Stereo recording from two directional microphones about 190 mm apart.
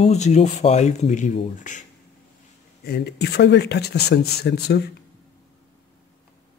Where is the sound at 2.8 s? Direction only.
60° left (ahead or behind).